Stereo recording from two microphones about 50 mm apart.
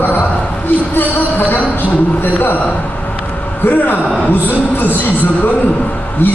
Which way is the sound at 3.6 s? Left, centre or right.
Left.